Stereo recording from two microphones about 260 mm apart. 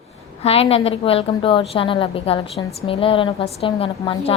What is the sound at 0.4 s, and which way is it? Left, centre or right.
A woman's voice, left.